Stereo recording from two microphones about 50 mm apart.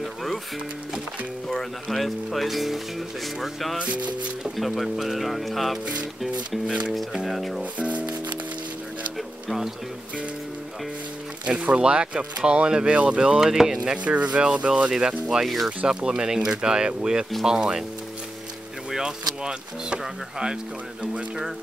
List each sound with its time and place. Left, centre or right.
0.0 s music: centre
1.5 s speech: centre
3.7 s speech: right
4.6 s speech: centre
7.2 s speech: centre
7.7 s speech: right
11.6 s speech: right
13.4 s speech: centre
14.0 s speech: right
15.4 s speech: centre
15.9 s speech: centre
18.9 s speech: centre